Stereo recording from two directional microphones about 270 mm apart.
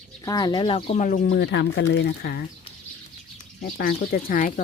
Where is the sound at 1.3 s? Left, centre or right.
Left.